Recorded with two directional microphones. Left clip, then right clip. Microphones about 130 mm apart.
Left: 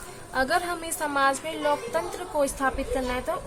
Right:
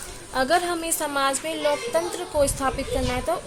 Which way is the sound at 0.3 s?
40° right (ahead or behind).